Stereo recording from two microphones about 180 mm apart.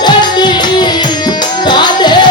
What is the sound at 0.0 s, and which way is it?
Music, 25° left (ahead or behind).